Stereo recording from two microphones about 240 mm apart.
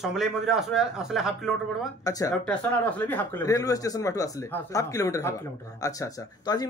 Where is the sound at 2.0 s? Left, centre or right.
Centre.